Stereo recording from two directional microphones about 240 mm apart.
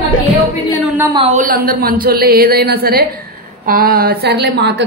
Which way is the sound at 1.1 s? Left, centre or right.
Right.